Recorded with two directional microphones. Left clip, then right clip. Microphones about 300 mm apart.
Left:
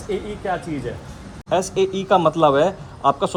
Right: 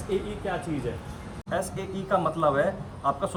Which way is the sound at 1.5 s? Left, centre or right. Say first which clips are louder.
Left 11 dB; centre.